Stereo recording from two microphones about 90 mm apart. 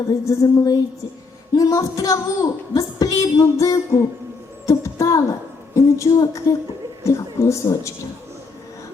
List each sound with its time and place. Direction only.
0.1 s speech: 40° left (ahead or behind)
4.6 s a sound: 35° left (ahead or behind)
7.0 s speech: 35° left (ahead or behind)